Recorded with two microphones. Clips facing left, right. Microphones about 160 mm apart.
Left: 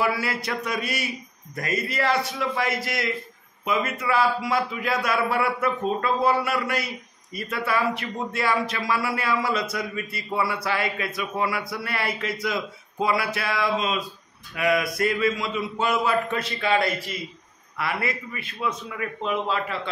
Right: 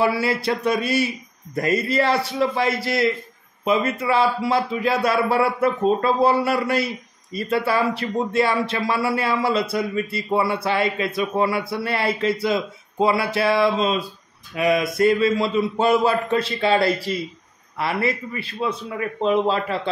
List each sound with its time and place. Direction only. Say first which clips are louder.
0.0 s a man's voice: right 5 dB; 30° right (ahead or behind)